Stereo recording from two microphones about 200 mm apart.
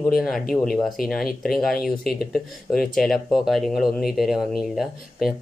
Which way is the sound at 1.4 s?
Centre (ahead or behind).